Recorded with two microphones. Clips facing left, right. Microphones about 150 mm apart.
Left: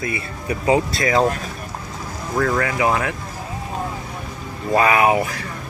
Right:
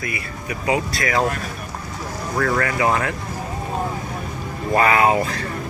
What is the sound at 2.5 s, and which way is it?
Speech, 10° left (ahead or behind).